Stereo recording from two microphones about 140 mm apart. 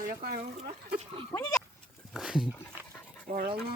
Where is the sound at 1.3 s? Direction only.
25° left (ahead or behind).